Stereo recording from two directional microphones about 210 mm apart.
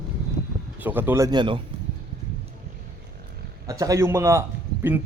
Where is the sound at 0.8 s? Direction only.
10° right (ahead or behind).